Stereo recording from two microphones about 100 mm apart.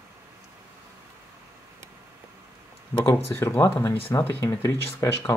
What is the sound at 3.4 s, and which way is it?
Speech, 25° left (ahead or behind).